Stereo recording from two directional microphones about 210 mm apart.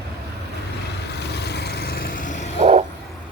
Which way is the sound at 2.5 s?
30° right (ahead or behind).